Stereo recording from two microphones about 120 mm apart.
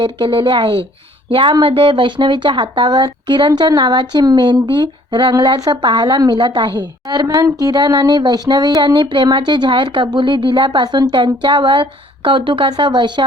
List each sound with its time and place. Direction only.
0.0 s a woman's voice: 45° right (ahead or behind)